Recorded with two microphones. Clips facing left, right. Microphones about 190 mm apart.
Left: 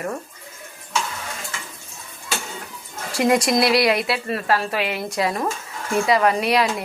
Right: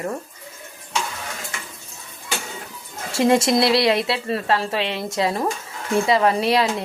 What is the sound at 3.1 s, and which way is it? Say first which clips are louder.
A woman's voice: right 1 dB; 25° right (ahead or behind).